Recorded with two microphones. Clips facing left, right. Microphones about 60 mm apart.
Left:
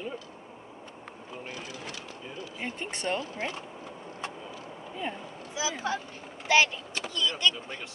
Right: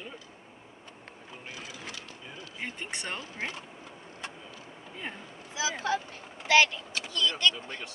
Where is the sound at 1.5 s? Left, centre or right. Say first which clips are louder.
Even; centre.